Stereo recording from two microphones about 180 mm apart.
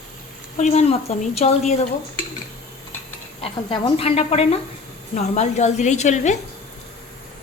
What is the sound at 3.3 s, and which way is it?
A woman's voice, 35° left (ahead or behind).